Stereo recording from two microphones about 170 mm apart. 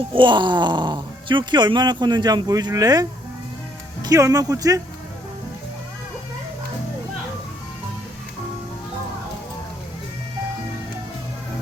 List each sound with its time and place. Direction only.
0.1 s speech: 30° right (ahead or behind)